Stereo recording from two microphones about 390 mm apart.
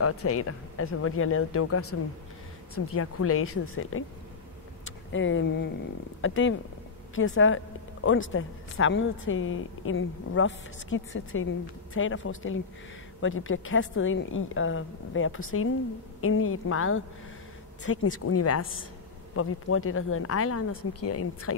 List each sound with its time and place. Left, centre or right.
0.0 s speech: left